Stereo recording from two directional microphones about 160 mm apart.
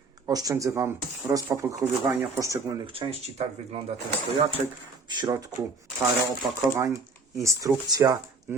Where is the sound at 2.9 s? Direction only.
35° right (ahead or behind).